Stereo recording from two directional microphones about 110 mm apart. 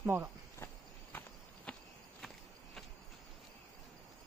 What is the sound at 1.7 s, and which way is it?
Walk, 10° left (ahead or behind).